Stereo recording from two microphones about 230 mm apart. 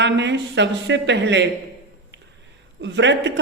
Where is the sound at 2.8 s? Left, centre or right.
Right.